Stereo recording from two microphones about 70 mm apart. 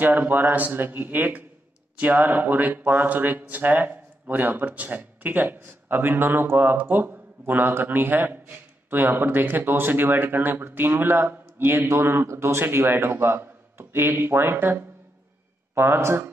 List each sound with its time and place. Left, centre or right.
0.0 s a man's voice: right